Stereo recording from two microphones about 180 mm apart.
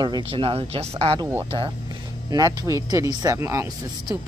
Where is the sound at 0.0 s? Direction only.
30° right (ahead or behind).